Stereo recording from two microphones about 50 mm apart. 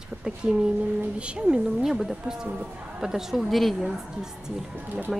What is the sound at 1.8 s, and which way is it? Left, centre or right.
A woman's voice, centre.